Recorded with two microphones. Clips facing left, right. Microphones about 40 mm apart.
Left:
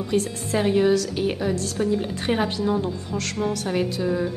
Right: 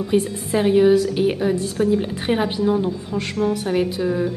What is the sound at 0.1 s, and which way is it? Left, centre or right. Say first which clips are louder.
A woman's voice: right 4 dB; centre.